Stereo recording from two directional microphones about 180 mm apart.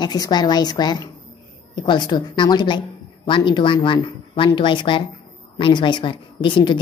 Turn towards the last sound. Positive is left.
turn(degrees=25)  # may be behind; listen again after turning